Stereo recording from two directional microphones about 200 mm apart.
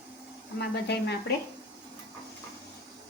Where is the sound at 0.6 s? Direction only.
55° left (ahead or behind).